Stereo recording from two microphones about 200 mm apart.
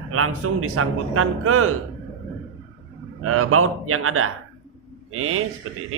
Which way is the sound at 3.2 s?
90° right.